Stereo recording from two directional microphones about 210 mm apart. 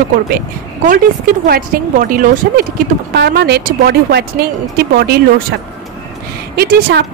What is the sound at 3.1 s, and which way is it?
Speech, 50° right (ahead or behind).